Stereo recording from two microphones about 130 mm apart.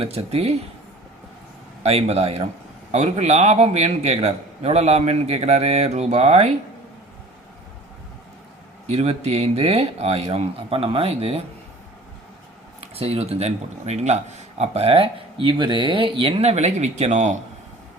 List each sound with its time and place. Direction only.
0.0 s speech: 50° right (ahead or behind)
1.8 s a man's voice: 50° right (ahead or behind)
8.9 s speech: 55° right (ahead or behind)
12.8 s speech: 50° right (ahead or behind); by 17.3 s 65° right (ahead or behind)